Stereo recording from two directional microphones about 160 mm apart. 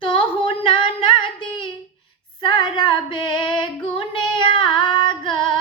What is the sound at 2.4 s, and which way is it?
Female singing, 30° left (ahead or behind).